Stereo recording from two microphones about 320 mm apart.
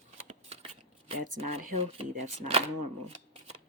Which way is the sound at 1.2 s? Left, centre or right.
Right.